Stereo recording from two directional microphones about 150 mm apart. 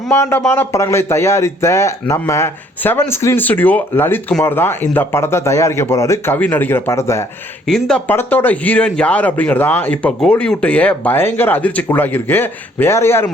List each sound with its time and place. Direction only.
0.1 s speech: 15° left (ahead or behind)
7.7 s speech: 5° left (ahead or behind)